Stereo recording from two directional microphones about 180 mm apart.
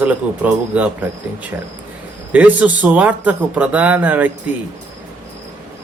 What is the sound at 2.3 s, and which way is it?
Speech, 10° right (ahead or behind).